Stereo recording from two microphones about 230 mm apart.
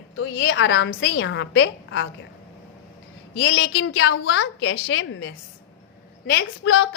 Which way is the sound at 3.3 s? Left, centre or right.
Left.